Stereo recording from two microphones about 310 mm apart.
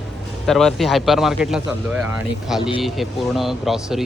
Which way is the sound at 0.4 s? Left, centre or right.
Centre.